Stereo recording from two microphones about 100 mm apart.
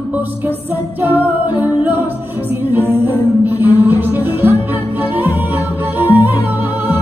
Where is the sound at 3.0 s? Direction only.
20° right (ahead or behind).